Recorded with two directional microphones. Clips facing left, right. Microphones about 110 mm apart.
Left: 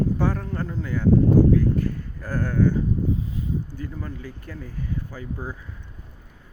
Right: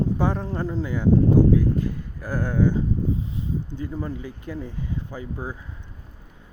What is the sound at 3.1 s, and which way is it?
Speech, 25° right (ahead or behind).